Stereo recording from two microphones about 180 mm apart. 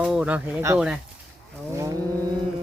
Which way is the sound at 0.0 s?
5° right (ahead or behind).